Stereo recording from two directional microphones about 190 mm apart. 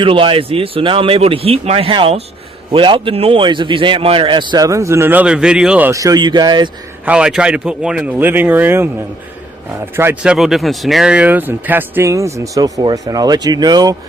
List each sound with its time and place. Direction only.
0.0 s a man's voice: 30° right (ahead or behind)
7.0 s a man's voice: 5° right (ahead or behind)
9.9 s speech: 10° right (ahead or behind)
10.3 s speech: centre (ahead or behind); by 13.9 s 20° right (ahead or behind)